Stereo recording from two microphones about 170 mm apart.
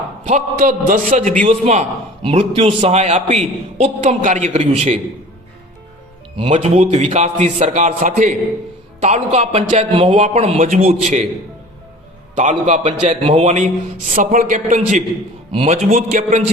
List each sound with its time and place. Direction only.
0.3 s a man's voice: 45° right (ahead or behind)
6.3 s a man's voice: 35° right (ahead or behind)
12.4 s a man's voice: 45° right (ahead or behind)